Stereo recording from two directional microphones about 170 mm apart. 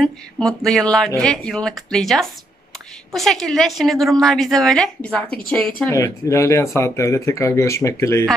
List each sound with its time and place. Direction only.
0.0 s a woman's voice: 5° left (ahead or behind)
5.9 s speech: 20° left (ahead or behind)